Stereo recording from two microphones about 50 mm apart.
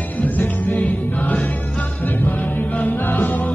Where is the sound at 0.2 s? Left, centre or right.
Left.